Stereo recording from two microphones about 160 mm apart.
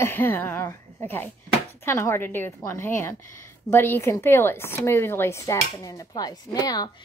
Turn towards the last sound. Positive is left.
turn(degrees=25)  # may be behind; listen again after turning